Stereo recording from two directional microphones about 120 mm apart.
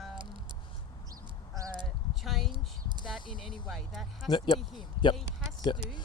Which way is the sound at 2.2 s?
Centre (ahead or behind).